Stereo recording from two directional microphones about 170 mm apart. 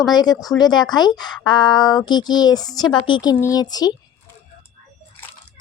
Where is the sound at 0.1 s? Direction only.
25° left (ahead or behind).